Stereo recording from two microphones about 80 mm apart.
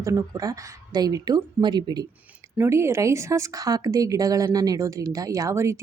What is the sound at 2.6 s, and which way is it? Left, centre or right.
Speech, right.